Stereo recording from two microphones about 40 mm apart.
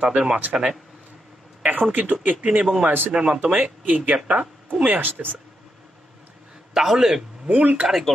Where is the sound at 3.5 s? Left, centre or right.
Right.